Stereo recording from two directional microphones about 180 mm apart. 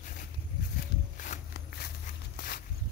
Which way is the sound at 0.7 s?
45° left (ahead or behind).